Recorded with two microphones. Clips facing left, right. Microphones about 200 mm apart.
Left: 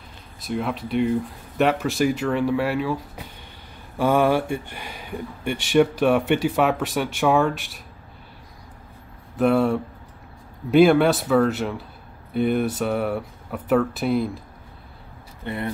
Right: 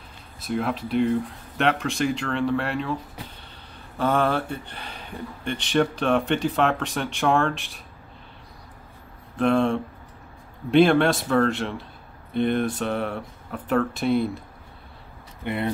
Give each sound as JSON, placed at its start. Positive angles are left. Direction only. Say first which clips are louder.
{"t": 0.4, "sound": "speech", "louder": "even", "side_deg": 0}
{"t": 4.0, "sound": "speech", "louder": "left 4 dB", "side_deg": 10}
{"t": 9.4, "sound": "speech", "louder": "left 2 dB", "side_deg": 5}
{"t": 15.4, "sound": "speech", "louder": "right 2 dB", "side_deg": -20}